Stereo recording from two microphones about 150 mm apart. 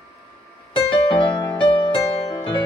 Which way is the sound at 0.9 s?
35° left (ahead or behind).